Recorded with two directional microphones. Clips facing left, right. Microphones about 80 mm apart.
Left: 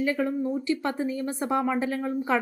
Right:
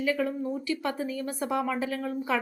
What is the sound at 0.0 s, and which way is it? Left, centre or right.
A woman's voice, left.